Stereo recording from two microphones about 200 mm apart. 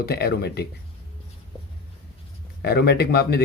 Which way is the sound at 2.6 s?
55° left (ahead or behind).